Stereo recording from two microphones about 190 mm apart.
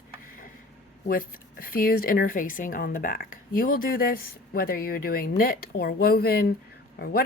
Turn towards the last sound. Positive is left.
turn(degrees=55)  # may be behind; listen again after turning